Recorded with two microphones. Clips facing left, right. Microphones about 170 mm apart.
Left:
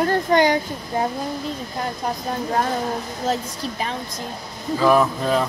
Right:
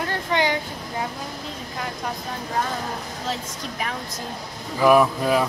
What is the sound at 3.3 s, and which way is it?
Speech, 30° left (ahead or behind).